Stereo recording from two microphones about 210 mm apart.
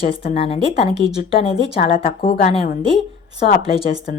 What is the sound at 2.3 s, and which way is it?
Speech, 40° left (ahead or behind).